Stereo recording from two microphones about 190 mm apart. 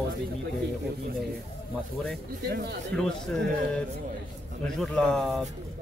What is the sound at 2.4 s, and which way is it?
Speech, 60° right (ahead or behind).